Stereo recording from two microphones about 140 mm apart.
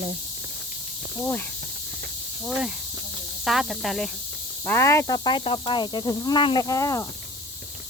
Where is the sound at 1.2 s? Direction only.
15° left (ahead or behind).